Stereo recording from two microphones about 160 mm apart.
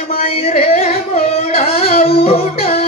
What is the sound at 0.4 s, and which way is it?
Carnatic music, 40° left (ahead or behind).